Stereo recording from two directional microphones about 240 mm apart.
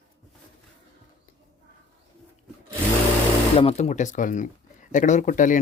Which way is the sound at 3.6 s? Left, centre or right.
Left.